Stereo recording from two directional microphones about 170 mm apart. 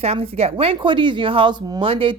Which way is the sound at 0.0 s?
35° right (ahead or behind).